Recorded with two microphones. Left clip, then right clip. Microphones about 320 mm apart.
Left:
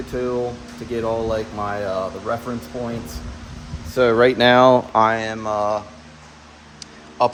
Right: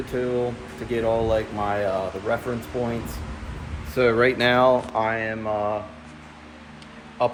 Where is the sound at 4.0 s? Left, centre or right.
Centre.